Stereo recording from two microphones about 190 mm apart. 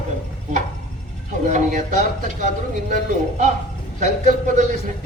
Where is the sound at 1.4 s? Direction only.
40° right (ahead or behind).